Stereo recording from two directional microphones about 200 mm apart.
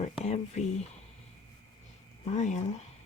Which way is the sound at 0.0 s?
35° left (ahead or behind).